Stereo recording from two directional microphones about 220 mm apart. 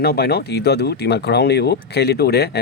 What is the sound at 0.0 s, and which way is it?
Speech, 45° left (ahead or behind).